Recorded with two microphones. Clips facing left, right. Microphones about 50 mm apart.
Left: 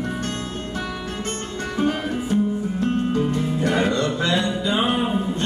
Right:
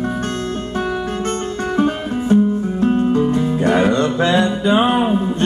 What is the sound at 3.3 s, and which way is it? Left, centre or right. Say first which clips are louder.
Music: right 6 dB; right.